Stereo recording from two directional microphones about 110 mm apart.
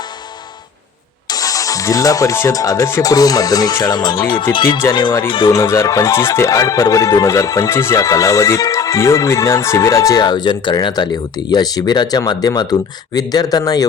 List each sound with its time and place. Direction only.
1.3 s speech: 35° left (ahead or behind)
4.8 s speech: 25° left (ahead or behind)